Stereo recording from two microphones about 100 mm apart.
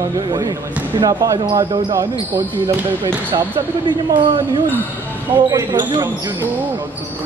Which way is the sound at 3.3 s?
50° right (ahead or behind).